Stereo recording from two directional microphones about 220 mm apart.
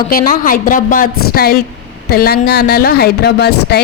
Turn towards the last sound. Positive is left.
turn(degrees=50)  # may be behind; listen again after turning